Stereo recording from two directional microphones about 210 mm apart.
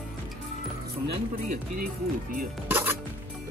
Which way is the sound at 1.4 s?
40° right (ahead or behind).